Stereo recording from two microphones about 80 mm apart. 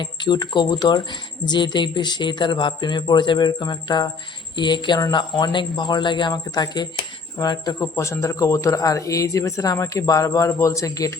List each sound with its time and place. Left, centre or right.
0.0 s speech: left
7.8 s speech: left